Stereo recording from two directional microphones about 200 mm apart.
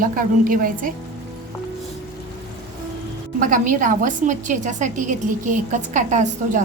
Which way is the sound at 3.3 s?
40° right (ahead or behind).